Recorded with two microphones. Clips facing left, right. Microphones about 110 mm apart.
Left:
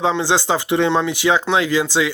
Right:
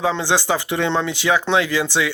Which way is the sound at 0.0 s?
15° left (ahead or behind).